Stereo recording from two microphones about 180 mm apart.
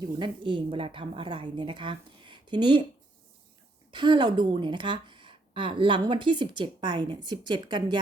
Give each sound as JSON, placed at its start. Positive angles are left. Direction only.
{"t": 0.0, "sound": "speech", "side_deg": -25}
{"t": 3.9, "sound": "speech", "side_deg": -25}